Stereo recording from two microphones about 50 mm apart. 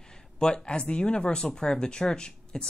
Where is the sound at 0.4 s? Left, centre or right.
Centre.